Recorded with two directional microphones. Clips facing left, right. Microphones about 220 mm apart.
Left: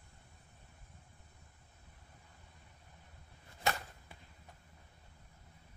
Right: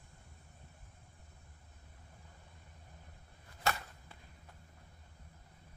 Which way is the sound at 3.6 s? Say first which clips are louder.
Even; 15° left (ahead or behind).